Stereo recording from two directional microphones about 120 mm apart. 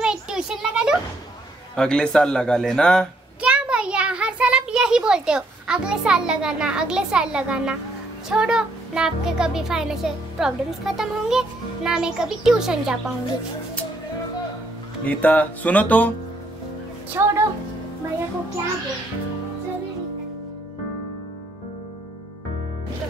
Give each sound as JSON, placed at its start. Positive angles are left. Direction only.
{"t": 0.0, "sound": "a sound", "side_deg": -5}
{"t": 1.8, "sound": "speech", "side_deg": 5}
{"t": 3.3, "sound": "a sound", "side_deg": -10}
{"t": 8.3, "sound": "a child's voice", "side_deg": -5}
{"t": 15.0, "sound": "speech", "side_deg": 15}
{"t": 17.1, "sound": "speech", "side_deg": -20}